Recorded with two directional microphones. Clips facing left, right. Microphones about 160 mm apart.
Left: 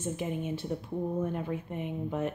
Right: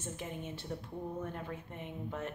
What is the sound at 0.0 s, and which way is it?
Speech, 15° left (ahead or behind).